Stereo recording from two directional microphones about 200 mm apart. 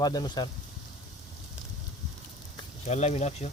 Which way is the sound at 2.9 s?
35° left (ahead or behind).